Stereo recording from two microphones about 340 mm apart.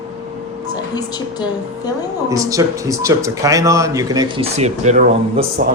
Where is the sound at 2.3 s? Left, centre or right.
Centre.